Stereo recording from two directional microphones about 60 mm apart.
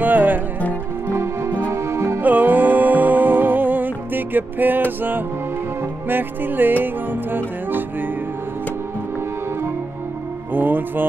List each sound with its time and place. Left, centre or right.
0.0 s music: right
1.1 s music: right
2.2 s music: right
6.0 s music: right
10.5 s music: right